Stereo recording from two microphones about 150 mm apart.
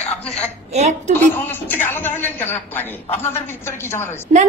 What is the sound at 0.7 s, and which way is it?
Speech, 50° right (ahead or behind).